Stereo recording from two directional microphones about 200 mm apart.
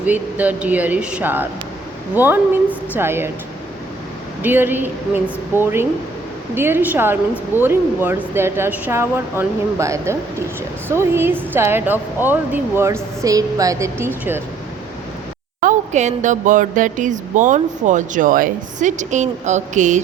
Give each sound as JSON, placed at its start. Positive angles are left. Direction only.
{"t": 0.0, "sound": "speech", "side_deg": -10}
{"t": 4.4, "sound": "speech", "side_deg": -10}
{"t": 15.6, "sound": "speech", "side_deg": -35}